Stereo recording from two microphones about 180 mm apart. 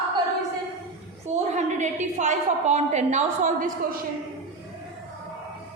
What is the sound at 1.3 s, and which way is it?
A woman's voice, 40° right (ahead or behind).